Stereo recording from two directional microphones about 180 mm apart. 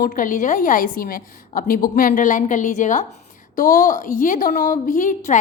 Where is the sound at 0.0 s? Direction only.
50° left (ahead or behind).